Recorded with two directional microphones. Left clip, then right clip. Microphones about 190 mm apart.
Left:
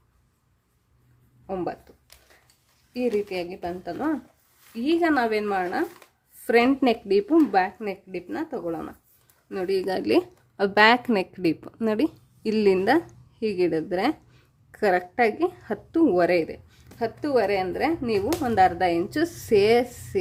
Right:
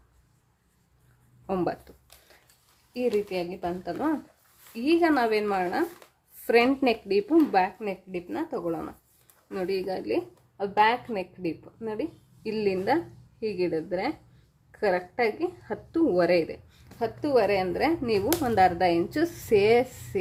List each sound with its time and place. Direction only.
1.5 s speech: 10° right (ahead or behind)
2.9 s a woman's voice: 15° left (ahead or behind)